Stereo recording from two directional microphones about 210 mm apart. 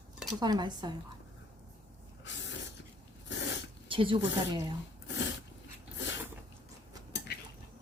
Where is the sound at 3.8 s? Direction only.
25° right (ahead or behind).